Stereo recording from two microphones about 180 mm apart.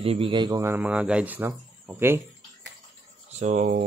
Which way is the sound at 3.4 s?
45° right (ahead or behind).